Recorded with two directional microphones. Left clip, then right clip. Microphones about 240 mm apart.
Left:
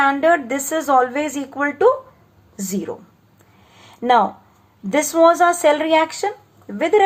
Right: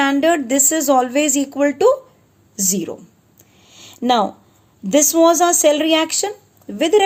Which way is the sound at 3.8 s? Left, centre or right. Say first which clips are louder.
Left 1 dB; right.